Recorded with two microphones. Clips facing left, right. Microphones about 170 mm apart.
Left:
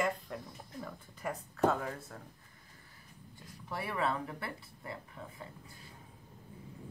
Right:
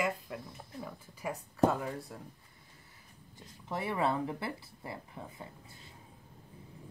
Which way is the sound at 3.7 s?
25° right (ahead or behind).